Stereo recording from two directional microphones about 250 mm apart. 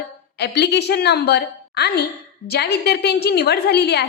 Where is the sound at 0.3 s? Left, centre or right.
Left.